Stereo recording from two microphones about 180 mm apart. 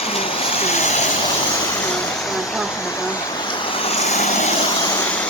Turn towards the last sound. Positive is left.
turn(degrees=40)  # may be behind; listen again after turning